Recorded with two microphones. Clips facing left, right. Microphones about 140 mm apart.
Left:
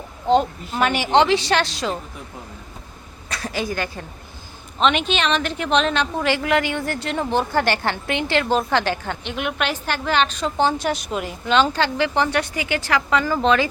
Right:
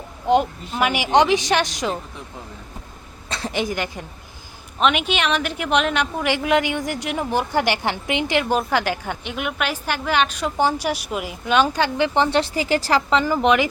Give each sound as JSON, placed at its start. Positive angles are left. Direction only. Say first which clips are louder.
{"t": 0.7, "sound": "a woman's voice", "louder": "even", "side_deg": -10}
{"t": 3.2, "sound": "a woman's voice", "louder": "right 1 dB", "side_deg": -25}
{"t": 13.1, "sound": "a woman's voice", "louder": "even", "side_deg": -20}